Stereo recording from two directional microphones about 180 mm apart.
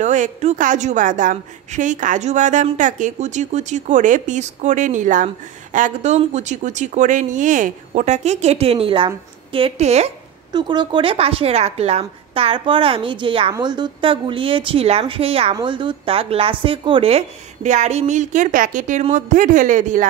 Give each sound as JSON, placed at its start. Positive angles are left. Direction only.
{"t": 0.0, "sound": "a woman's voice", "side_deg": -40}
{"t": 10.5, "sound": "a woman's voice", "side_deg": -25}